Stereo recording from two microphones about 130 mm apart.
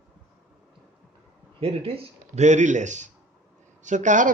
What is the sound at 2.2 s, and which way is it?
Speech, 65° right (ahead or behind).